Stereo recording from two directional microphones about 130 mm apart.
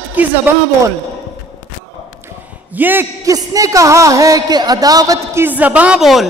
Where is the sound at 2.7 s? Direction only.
15° right (ahead or behind).